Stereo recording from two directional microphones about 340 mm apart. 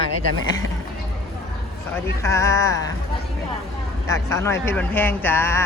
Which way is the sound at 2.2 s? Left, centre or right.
Centre.